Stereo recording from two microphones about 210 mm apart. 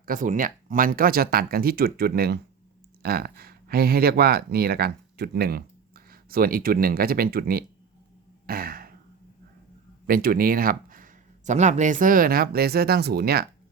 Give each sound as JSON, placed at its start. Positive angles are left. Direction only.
{"t": 0.0, "sound": "speech", "side_deg": -40}
{"t": 8.4, "sound": "throat clearing", "side_deg": -45}
{"t": 10.1, "sound": "speech", "side_deg": -45}